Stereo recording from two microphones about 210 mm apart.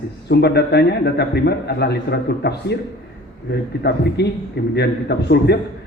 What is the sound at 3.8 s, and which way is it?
A man's voice, 50° left (ahead or behind).